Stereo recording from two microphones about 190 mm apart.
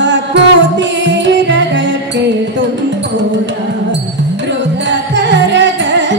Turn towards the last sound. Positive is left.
turn(degrees=-70)  # may be behind; listen again after turning